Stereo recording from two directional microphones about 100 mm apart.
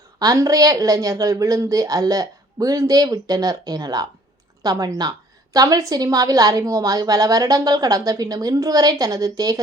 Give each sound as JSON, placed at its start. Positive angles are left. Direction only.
{"t": 0.2, "sound": "a woman's voice", "side_deg": -35}